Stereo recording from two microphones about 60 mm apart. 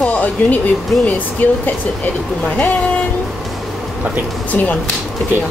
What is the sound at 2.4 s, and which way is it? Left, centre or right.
Speech, centre.